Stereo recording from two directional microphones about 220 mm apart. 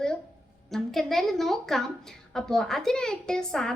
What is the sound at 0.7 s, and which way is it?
A woman's voice, centre (ahead or behind).